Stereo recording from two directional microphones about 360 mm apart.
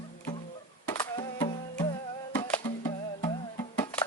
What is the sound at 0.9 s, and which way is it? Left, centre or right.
Music, centre.